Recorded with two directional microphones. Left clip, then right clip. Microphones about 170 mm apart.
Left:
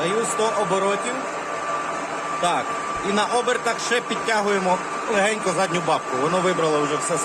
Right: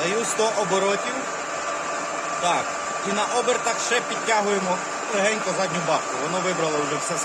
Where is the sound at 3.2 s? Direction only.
25° left (ahead or behind).